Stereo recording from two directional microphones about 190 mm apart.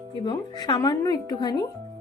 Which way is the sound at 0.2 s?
20° left (ahead or behind).